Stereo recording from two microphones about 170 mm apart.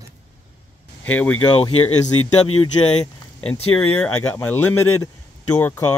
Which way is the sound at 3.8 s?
10° left (ahead or behind).